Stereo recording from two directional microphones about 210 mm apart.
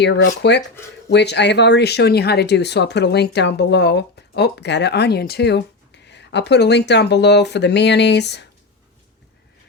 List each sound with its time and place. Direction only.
0.0 s speech: 55° left (ahead or behind)